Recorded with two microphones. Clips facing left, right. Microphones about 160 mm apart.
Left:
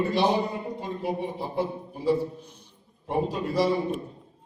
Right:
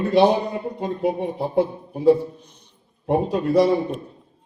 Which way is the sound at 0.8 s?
60° right (ahead or behind).